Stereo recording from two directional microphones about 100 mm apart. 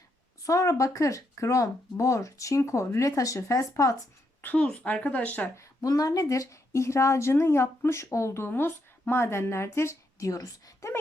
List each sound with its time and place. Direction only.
0.4 s speech: 30° left (ahead or behind)
4.4 s a woman's voice: 15° left (ahead or behind)
5.5 s speech: 35° left (ahead or behind)